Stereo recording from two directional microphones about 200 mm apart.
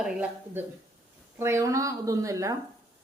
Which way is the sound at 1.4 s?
15° right (ahead or behind).